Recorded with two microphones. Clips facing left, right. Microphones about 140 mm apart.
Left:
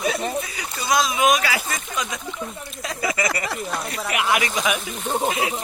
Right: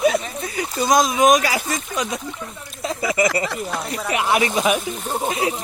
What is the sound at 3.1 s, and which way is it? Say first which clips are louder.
Speech: right 5 dB; 25° right (ahead or behind).